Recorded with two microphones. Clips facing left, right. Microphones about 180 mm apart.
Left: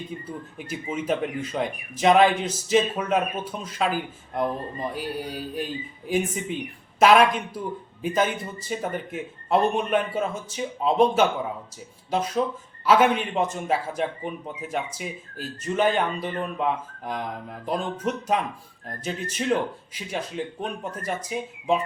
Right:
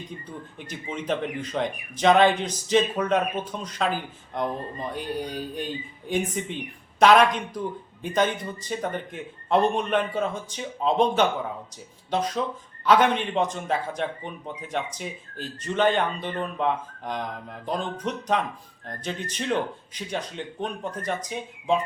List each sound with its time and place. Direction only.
0.3 s speech: 5° left (ahead or behind)
4.9 s speech: 5° left (ahead or behind)